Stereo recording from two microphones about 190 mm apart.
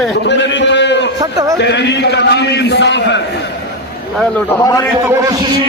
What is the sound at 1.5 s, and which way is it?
A man's voice, 65° left (ahead or behind).